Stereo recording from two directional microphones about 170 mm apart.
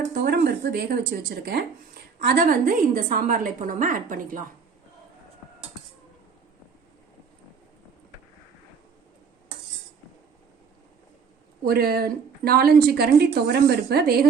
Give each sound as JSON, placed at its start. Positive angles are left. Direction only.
{"t": 0.0, "sound": "a woman's voice", "side_deg": -65}
{"t": 11.6, "sound": "a woman's voice", "side_deg": -65}